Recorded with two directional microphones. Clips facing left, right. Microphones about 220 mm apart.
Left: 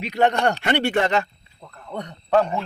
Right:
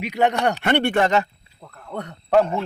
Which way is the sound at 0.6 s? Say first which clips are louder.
Right 2 dB; 55° right (ahead or behind).